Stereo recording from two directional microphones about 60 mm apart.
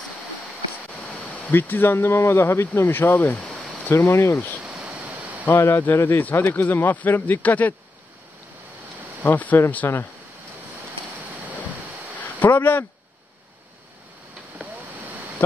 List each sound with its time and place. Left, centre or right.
1.5 s speech: left
4.6 s a sound: centre
5.4 s speech: left
9.2 s speech: left
9.8 s speech: left
12.2 s speech: left